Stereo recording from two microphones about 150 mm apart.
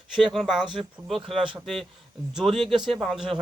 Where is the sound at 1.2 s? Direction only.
35° right (ahead or behind).